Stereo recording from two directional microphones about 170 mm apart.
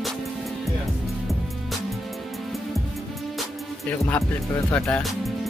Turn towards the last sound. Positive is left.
turn(degrees=0)  # may be behind; listen again after turning